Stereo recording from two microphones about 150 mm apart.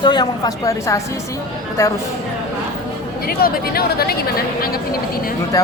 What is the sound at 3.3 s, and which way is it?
Speech, 85° left.